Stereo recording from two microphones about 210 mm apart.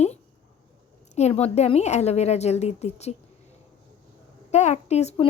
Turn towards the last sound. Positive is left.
turn(degrees=30)  # may be behind; listen again after turning